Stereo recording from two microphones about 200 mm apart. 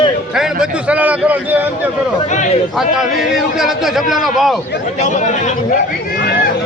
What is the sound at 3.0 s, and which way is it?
A man's voice, centre (ahead or behind).